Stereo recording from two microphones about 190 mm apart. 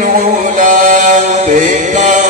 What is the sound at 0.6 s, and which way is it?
Chant, 45° right (ahead or behind).